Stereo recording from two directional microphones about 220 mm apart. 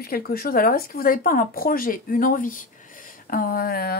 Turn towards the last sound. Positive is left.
turn(degrees=45)  # may be behind; listen again after turning